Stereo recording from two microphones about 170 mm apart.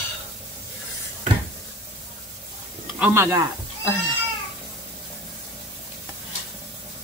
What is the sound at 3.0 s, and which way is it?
Speech, 15° right (ahead or behind).